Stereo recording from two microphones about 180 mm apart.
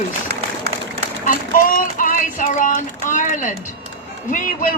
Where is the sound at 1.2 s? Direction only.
50° left (ahead or behind).